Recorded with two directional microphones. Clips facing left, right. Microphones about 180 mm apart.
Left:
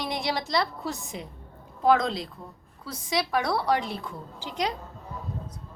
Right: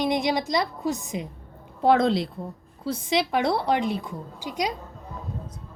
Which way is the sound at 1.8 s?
30° right (ahead or behind).